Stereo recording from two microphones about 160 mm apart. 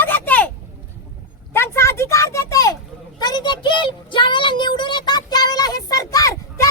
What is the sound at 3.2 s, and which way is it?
Child singing, 25° left (ahead or behind).